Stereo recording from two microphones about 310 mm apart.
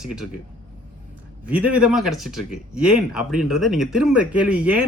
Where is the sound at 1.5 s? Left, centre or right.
Centre.